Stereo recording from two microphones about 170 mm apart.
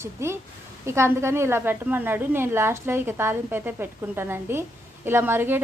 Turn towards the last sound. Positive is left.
turn(degrees=-10)  # may be behind; listen again after turning